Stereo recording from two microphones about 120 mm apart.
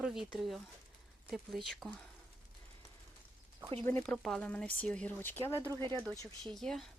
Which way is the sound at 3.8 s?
20° left (ahead or behind).